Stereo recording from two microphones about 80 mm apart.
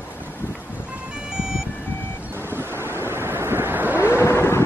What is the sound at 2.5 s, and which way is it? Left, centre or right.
Waves, right.